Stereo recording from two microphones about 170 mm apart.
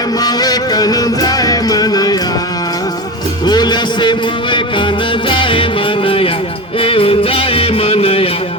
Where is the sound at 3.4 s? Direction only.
25° left (ahead or behind).